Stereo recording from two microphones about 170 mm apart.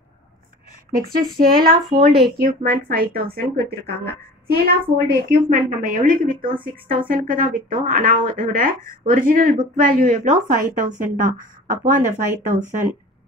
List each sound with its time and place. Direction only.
0.9 s speech: 60° right (ahead or behind)